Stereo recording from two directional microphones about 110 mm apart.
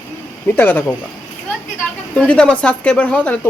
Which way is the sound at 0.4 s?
20° left (ahead or behind).